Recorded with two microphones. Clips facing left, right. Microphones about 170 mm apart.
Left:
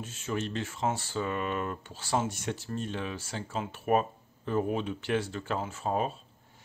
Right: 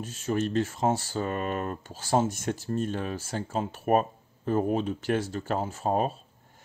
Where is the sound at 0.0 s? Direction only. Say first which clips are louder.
Right 5 dB; 40° right (ahead or behind).